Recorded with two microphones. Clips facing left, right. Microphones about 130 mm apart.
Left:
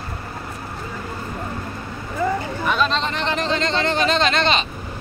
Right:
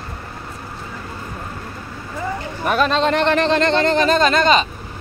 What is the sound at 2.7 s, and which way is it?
Speech, 50° right (ahead or behind).